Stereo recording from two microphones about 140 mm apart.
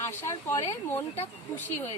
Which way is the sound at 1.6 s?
15° left (ahead or behind).